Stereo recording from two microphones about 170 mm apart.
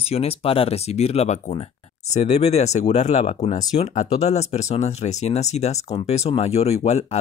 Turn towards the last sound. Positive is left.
turn(degrees=40)  # may be behind; listen again after turning